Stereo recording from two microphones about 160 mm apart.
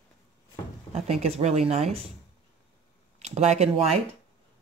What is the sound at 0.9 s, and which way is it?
Speech, 40° right (ahead or behind).